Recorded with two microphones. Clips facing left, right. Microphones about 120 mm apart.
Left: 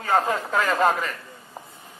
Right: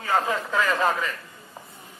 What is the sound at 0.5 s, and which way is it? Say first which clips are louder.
Speech: left 2 dB; 40° left (ahead or behind).